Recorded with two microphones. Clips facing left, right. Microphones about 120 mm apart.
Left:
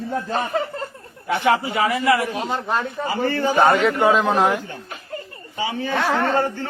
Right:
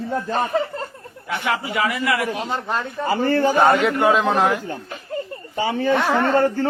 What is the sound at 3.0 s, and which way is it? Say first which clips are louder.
Speech: right 6 dB; 50° right (ahead or behind).